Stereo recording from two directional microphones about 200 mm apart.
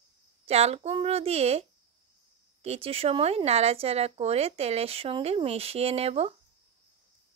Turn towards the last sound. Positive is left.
turn(degrees=-30)  # may be behind; listen again after turning